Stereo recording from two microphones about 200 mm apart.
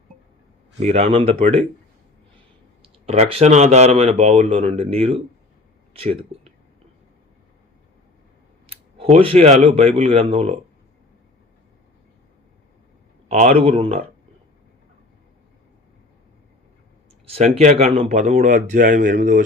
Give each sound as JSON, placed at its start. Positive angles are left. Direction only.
{"t": 0.8, "sound": "speech", "side_deg": -35}
{"t": 2.8, "sound": "speech", "side_deg": -30}
{"t": 8.7, "sound": "speech", "side_deg": -30}
{"t": 13.2, "sound": "speech", "side_deg": -35}
{"t": 17.2, "sound": "speech", "side_deg": -30}